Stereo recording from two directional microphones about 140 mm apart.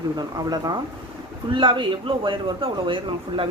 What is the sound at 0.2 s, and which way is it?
A man's voice, 25° right (ahead or behind).